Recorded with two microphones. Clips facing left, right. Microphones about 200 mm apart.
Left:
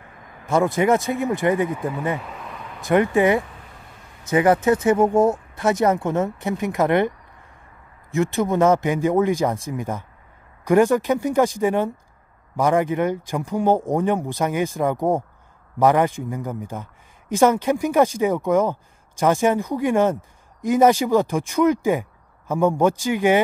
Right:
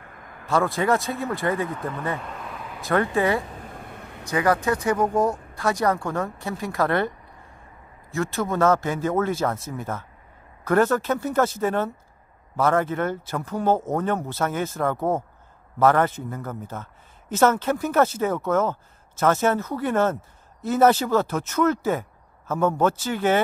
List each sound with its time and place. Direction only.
0.5 s a man's voice: 20° left (ahead or behind); by 2.9 s centre (ahead or behind)
2.9 s a man's voice: 15° left (ahead or behind)
3.4 s a sound: 45° right (ahead or behind); by 4.2 s 60° right (ahead or behind)
4.3 s speech: 25° left (ahead or behind)
8.1 s a man's voice: 20° left (ahead or behind)